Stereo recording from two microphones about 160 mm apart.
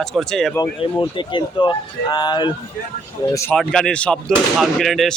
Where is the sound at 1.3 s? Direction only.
30° left (ahead or behind).